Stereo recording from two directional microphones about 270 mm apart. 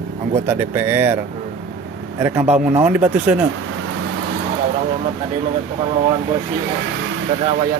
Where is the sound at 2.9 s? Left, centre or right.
Centre.